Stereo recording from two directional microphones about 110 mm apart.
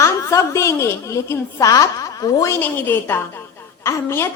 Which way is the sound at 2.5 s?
20° left (ahead or behind).